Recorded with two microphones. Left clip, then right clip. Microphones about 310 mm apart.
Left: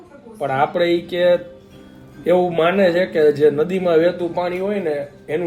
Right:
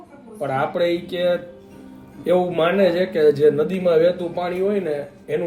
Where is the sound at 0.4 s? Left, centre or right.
Centre.